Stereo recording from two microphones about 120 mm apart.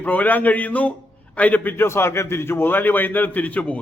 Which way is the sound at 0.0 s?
15° left (ahead or behind).